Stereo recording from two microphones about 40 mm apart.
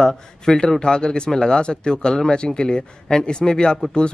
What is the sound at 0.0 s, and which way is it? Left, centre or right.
Speech, centre.